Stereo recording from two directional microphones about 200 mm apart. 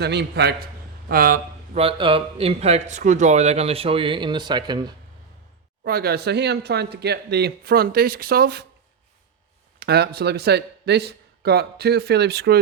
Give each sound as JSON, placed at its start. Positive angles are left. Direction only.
{"t": 0.0, "sound": "a man's voice", "side_deg": -55}
{"t": 1.7, "sound": "speech", "side_deg": -30}
{"t": 5.8, "sound": "speech", "side_deg": -50}
{"t": 9.8, "sound": "a man's voice", "side_deg": -55}